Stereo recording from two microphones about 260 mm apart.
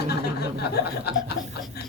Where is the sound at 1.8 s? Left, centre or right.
Left.